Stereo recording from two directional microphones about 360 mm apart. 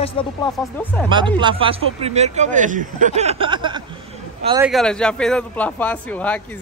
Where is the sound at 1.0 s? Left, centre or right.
Centre.